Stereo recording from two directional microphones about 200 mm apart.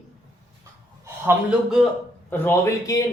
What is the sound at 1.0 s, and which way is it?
Speech, 10° right (ahead or behind).